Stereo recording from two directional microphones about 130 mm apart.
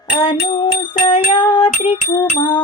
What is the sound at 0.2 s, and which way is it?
Music, 35° left (ahead or behind).